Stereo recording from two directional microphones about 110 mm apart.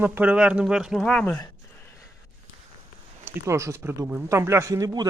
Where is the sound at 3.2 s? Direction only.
25° right (ahead or behind).